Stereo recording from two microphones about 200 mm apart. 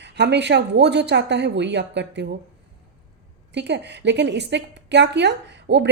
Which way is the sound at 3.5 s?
60° right (ahead or behind).